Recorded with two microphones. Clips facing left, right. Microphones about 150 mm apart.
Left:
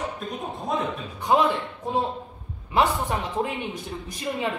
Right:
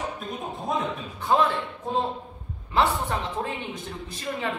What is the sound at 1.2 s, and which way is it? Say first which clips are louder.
Speech: left 2 dB; 15° left (ahead or behind).